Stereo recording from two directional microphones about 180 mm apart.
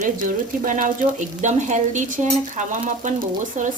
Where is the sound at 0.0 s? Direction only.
45° right (ahead or behind).